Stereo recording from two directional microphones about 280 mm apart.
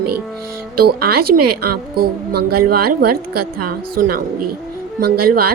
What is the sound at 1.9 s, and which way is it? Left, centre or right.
Speech, right.